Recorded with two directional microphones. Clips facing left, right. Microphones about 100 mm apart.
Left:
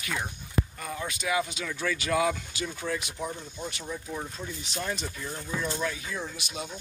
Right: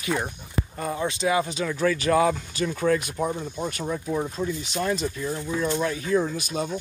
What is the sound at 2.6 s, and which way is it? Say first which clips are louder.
Speech: right 10 dB; 55° right (ahead or behind).